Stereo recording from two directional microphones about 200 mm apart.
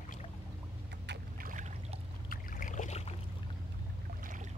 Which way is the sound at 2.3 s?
45° left (ahead or behind).